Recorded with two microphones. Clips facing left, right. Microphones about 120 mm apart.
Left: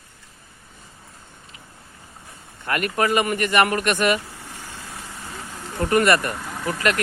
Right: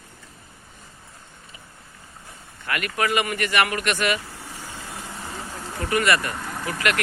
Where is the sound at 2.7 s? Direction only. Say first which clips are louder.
Left 3 dB; 40° left (ahead or behind).